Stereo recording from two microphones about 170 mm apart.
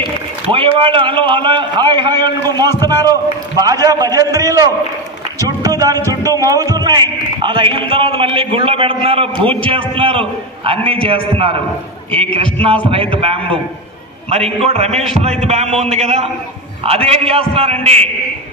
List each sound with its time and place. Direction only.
0.0 s a man's voice: 30° right (ahead or behind)
12.5 s a man's voice: 35° right (ahead or behind)